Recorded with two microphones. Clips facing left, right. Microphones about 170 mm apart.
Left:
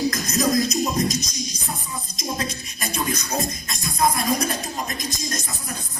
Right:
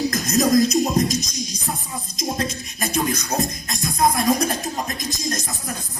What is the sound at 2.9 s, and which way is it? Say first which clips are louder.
Music: right 3 dB; 60° right (ahead or behind).